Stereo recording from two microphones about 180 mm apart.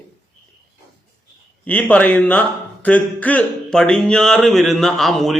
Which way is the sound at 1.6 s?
5° left (ahead or behind).